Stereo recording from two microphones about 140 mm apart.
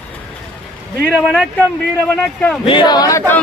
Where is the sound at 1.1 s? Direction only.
5° right (ahead or behind).